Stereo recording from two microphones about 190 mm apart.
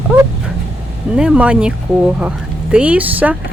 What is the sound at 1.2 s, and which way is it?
Speech, 5° right (ahead or behind).